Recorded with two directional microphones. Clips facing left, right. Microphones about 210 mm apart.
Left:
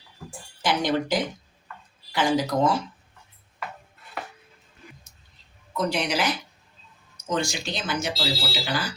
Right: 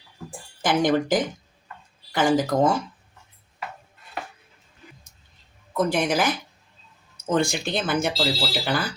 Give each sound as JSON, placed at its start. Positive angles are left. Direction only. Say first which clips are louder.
{"t": 0.3, "sound": "a sound", "louder": "right 2 dB", "side_deg": -50}
{"t": 2.1, "sound": "speech", "louder": "right 3 dB", "side_deg": -50}
{"t": 5.7, "sound": "speech", "louder": "right 4 dB", "side_deg": -50}